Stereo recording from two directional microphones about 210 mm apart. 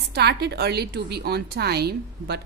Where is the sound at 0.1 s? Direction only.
50° right (ahead or behind).